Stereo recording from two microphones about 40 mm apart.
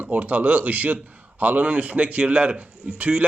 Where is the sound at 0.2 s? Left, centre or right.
Right.